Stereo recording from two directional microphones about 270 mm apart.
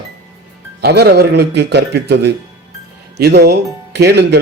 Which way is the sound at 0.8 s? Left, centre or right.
Right.